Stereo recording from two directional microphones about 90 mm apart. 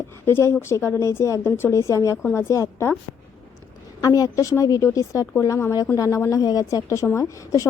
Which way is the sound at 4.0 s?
40° left (ahead or behind).